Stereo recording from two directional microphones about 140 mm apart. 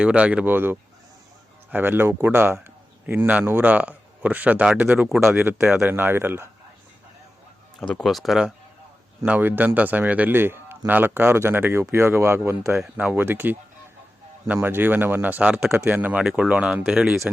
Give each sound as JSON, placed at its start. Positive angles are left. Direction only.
{"t": 0.0, "sound": "a man's voice", "side_deg": -10}
{"t": 5.2, "sound": "a man's voice", "side_deg": -15}
{"t": 5.6, "sound": "speech", "side_deg": -5}
{"t": 5.9, "sound": "a man's voice", "side_deg": -15}
{"t": 7.8, "sound": "a man's voice", "side_deg": 5}
{"t": 12.7, "sound": "speech", "side_deg": 0}
{"t": 13.1, "sound": "a man's voice", "side_deg": -15}